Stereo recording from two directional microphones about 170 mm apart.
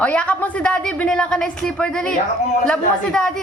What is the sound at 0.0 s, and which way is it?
A woman's voice, 10° left (ahead or behind).